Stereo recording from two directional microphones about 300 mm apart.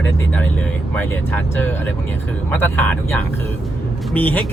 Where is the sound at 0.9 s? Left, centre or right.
Centre.